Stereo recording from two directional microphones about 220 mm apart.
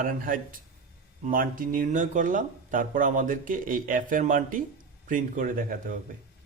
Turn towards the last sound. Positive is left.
turn(degrees=-40)  # may be behind; listen again after turning